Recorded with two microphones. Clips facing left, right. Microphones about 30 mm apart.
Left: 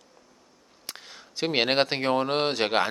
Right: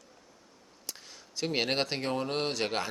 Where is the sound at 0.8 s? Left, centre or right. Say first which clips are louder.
Left 4 dB; left.